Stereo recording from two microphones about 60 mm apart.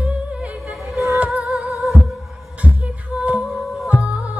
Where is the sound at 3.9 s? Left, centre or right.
Right.